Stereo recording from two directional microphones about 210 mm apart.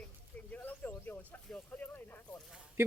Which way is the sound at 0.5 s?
5° left (ahead or behind).